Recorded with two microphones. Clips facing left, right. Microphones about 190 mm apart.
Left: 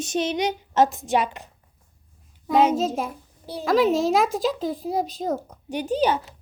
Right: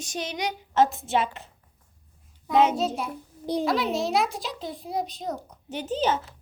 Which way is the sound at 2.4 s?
45° left (ahead or behind).